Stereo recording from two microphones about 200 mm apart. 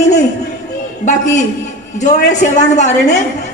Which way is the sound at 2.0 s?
35° left (ahead or behind).